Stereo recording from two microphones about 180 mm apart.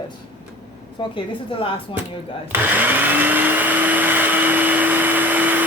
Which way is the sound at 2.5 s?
10° right (ahead or behind).